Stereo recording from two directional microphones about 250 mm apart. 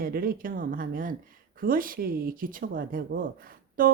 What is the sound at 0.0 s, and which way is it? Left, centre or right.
Speech, right.